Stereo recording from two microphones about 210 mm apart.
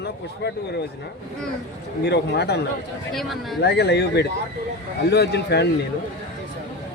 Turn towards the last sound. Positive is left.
turn(degrees=50)  # may be behind; listen again after turning